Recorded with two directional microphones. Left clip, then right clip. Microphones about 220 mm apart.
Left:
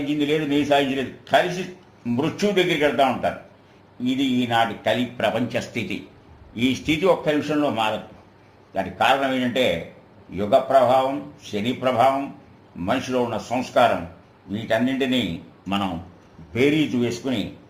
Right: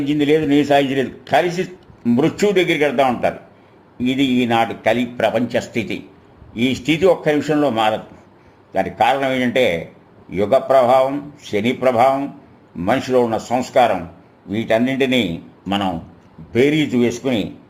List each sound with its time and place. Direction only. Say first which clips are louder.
0.1 s speech: right 7 dB; 50° right (ahead or behind)
6.5 s a man's voice: right 4 dB; 25° right (ahead or behind)
7.3 s speech: right 5 dB; 40° right (ahead or behind)
16.5 s speech: right 4 dB; 40° right (ahead or behind)